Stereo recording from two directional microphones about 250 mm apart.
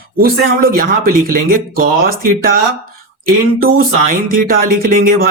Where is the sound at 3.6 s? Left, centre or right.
Right.